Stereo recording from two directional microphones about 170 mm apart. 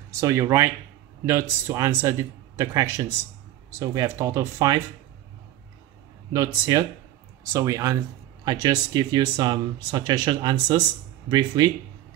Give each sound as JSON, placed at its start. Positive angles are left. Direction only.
{"t": 0.2, "sound": "a man's voice", "side_deg": -15}
{"t": 6.3, "sound": "a man's voice", "side_deg": -20}